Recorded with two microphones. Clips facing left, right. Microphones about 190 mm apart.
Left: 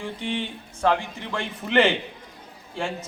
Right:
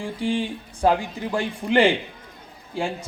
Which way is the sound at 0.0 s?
35° right (ahead or behind).